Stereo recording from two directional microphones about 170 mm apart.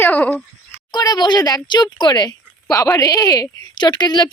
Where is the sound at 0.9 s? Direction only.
25° left (ahead or behind).